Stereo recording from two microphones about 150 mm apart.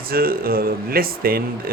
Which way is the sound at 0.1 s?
80° right.